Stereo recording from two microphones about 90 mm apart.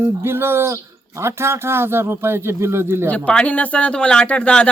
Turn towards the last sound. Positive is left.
turn(degrees=10)  # may be behind; listen again after turning